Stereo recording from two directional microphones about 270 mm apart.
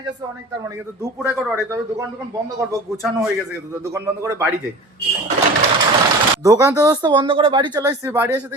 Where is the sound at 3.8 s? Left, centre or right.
Centre.